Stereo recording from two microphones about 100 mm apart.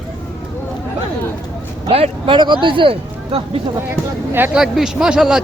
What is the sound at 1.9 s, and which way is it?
Speech, 75° right (ahead or behind).